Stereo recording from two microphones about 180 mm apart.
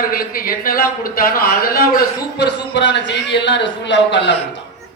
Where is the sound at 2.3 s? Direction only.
75° left (ahead or behind).